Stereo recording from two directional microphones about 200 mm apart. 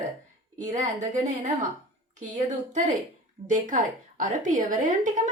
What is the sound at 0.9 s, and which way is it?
Speech, 35° right (ahead or behind).